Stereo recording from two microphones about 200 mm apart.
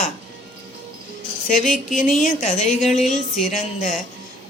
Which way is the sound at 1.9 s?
40° left (ahead or behind).